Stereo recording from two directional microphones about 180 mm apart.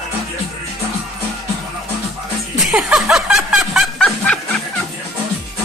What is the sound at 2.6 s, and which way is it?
Snicker, centre (ahead or behind).